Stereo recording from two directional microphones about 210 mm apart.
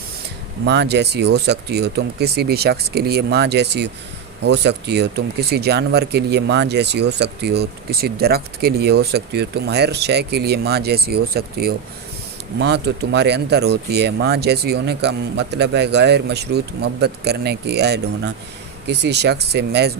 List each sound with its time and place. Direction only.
0.6 s speech: 55° right (ahead or behind)